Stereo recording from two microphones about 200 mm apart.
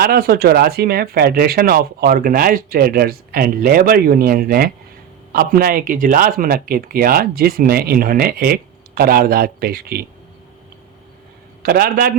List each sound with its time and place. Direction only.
0.0 s speech: 50° right (ahead or behind)
11.6 s speech: 45° right (ahead or behind)